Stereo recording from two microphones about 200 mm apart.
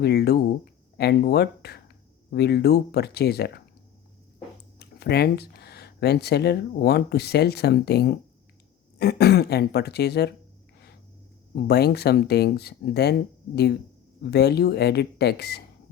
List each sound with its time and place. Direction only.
0.0 s speech: 55° left (ahead or behind)
4.8 s speech: 55° left (ahead or behind)
11.5 s speech: 55° left (ahead or behind)
14.3 s speech: 55° left (ahead or behind)